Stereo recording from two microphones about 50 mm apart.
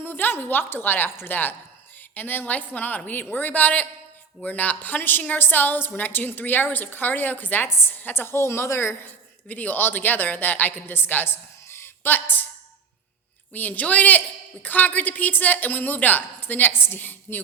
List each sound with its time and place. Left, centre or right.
0.0 s a woman's voice: left
9.5 s a woman's voice: left
11.7 s a sound: left
13.5 s a woman's voice: left